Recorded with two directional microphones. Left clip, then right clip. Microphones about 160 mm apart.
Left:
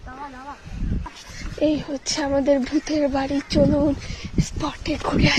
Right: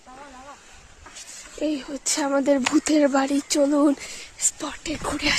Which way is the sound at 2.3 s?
45° right (ahead or behind).